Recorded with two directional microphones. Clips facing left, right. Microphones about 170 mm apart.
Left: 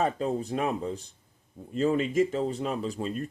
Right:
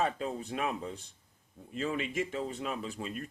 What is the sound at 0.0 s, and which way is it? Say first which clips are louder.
Speech: left 5 dB; 40° left (ahead or behind).